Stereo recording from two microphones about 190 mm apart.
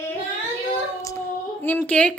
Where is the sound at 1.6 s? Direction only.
5° left (ahead or behind).